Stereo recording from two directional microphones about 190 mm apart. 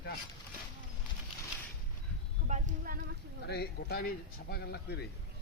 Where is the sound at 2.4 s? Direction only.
40° right (ahead or behind).